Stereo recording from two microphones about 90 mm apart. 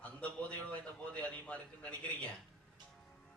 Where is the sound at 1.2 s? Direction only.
15° left (ahead or behind).